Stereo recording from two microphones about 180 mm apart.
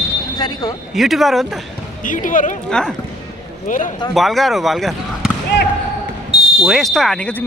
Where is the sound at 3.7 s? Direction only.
45° left (ahead or behind).